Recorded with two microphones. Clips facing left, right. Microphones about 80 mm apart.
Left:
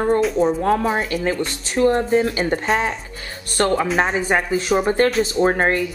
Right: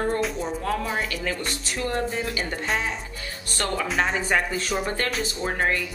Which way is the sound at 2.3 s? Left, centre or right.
Left.